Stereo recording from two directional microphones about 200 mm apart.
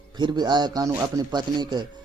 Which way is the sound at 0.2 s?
20° right (ahead or behind).